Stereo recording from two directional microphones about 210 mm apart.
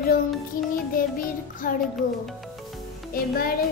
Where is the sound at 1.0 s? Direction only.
40° left (ahead or behind).